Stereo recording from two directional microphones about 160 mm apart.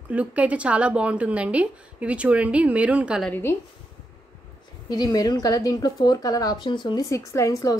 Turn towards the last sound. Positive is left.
turn(degrees=20)  # may be behind; listen again after turning